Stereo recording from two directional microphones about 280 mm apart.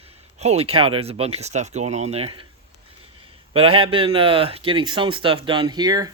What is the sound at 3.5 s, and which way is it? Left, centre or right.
Speech, centre.